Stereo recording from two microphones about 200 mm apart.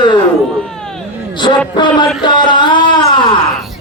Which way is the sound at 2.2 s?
20° left (ahead or behind).